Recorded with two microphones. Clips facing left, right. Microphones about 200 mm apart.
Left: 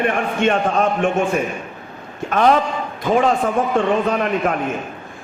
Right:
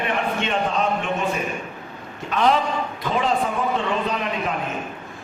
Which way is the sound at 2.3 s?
55° left (ahead or behind).